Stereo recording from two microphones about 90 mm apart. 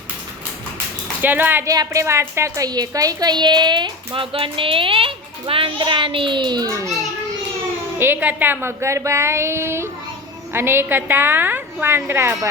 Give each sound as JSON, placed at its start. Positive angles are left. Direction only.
{"t": 1.2, "sound": "speech", "side_deg": -20}
{"t": 1.6, "sound": "a woman's voice", "side_deg": -40}
{"t": 2.6, "sound": "a woman's voice", "side_deg": -45}
{"t": 7.9, "sound": "speech", "side_deg": -25}